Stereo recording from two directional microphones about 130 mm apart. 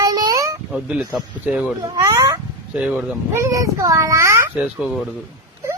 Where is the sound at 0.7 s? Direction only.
10° right (ahead or behind).